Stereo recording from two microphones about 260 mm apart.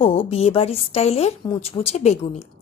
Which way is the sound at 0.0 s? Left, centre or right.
Left.